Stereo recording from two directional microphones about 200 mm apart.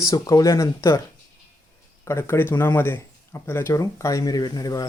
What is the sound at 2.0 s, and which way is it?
Speech, 15° left (ahead or behind).